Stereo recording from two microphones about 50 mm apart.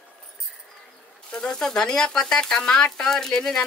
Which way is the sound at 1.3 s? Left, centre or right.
Centre.